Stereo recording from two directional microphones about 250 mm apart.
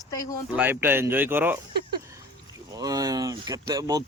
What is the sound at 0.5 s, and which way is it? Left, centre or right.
Speech, centre.